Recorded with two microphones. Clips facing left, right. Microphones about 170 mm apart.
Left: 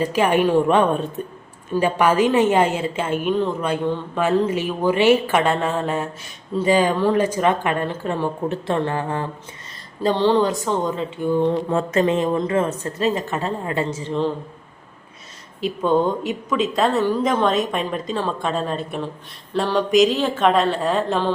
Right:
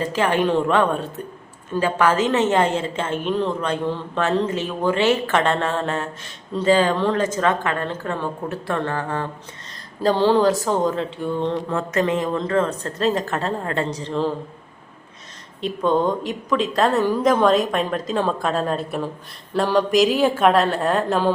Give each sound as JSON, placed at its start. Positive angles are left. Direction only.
{"t": 0.0, "sound": "speech", "side_deg": 15}
{"t": 10.0, "sound": "a woman's voice", "side_deg": -5}
{"t": 11.3, "sound": "speech", "side_deg": 10}
{"t": 11.9, "sound": "speech", "side_deg": 25}
{"t": 12.8, "sound": "a woman's voice", "side_deg": 5}
{"t": 15.6, "sound": "a woman's voice", "side_deg": 5}